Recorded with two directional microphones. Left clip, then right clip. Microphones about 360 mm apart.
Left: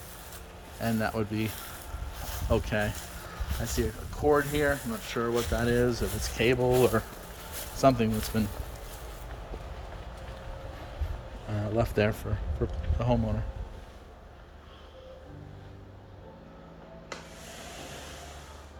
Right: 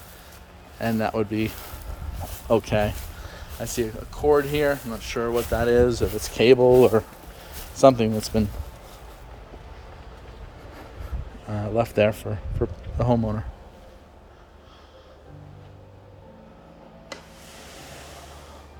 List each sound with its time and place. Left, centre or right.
0.8 s speech: centre
11.5 s speech: centre